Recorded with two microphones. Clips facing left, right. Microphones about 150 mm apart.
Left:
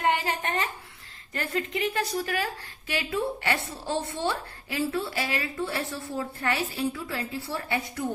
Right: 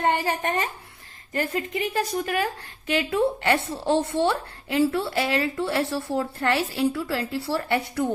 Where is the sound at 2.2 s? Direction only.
50° right (ahead or behind); by 8.1 s 70° right (ahead or behind).